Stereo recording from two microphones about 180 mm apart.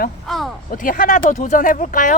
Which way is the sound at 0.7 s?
50° left (ahead or behind).